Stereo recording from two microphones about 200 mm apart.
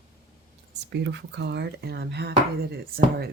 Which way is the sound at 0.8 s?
60° right (ahead or behind).